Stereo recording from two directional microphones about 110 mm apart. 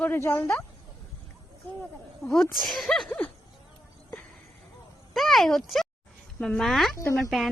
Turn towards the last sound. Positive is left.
turn(degrees=0)  # may be behind; listen again after turning